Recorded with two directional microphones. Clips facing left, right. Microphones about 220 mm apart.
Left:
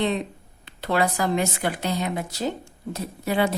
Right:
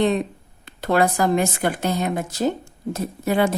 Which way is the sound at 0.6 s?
45° right (ahead or behind).